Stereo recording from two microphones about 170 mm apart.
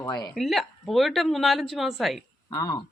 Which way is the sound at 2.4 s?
20° left (ahead or behind).